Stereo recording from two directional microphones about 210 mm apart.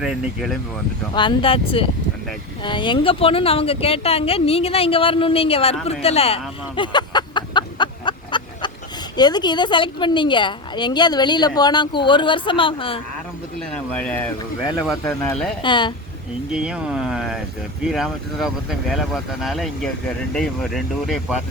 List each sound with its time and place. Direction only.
0.0 s speech: centre (ahead or behind)
1.1 s a woman's voice: 20° left (ahead or behind)
13.6 s speech: 5° left (ahead or behind)
15.6 s a woman's voice: 20° left (ahead or behind)
16.5 s speech: 5° right (ahead or behind)